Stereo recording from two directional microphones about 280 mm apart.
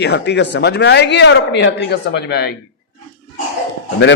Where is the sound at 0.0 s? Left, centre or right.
Left.